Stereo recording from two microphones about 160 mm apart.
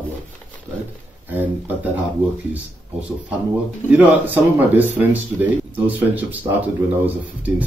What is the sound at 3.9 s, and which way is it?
Speech, 10° right (ahead or behind).